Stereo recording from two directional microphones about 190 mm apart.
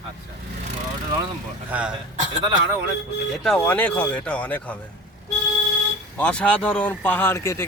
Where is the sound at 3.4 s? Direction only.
5° left (ahead or behind).